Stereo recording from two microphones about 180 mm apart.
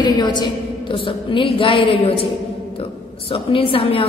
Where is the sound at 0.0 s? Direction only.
25° left (ahead or behind).